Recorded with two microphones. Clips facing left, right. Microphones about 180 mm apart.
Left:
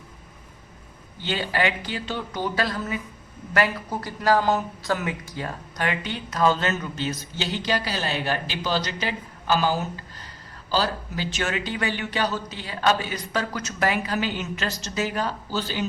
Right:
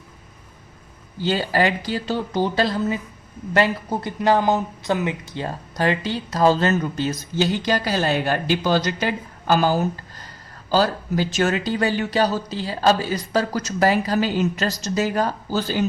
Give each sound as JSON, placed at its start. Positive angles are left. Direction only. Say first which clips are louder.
{"t": 1.2, "sound": "speech", "louder": "right 5 dB", "side_deg": -40}